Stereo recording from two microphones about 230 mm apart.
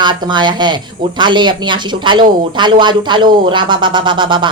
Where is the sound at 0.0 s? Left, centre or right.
Centre.